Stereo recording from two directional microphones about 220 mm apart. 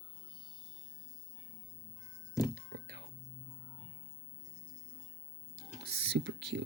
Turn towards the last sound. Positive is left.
turn(degrees=-50)  # may be behind; listen again after turning